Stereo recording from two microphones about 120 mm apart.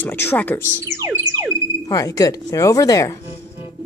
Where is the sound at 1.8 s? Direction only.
30° left (ahead or behind).